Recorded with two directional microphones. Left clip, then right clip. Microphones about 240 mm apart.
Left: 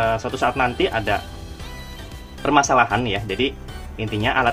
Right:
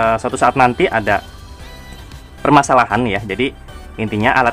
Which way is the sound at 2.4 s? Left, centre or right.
Right.